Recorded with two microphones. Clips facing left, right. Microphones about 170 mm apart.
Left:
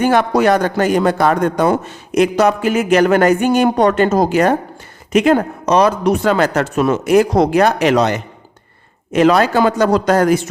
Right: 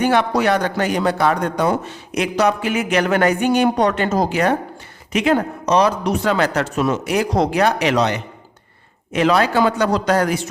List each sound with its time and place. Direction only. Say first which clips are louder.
0.0 s a man's voice: left 4 dB; 45° left (ahead or behind)